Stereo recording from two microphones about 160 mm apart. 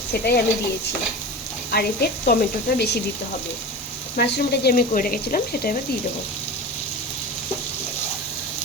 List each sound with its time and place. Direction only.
0.1 s speech: 80° left
1.7 s speech: 80° left
4.2 s speech: 90° left; by 5.7 s 65° left (ahead or behind)